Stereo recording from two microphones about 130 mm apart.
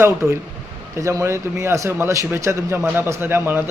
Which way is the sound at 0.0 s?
20° right (ahead or behind).